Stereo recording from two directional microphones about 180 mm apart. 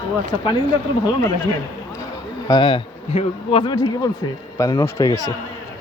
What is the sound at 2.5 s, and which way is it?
Speech, 25° left (ahead or behind).